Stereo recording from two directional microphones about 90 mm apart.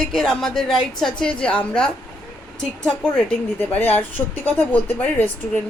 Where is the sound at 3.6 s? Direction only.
20° left (ahead or behind).